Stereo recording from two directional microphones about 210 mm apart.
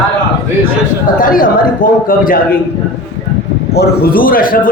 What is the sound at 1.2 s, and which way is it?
Speech, 40° left (ahead or behind).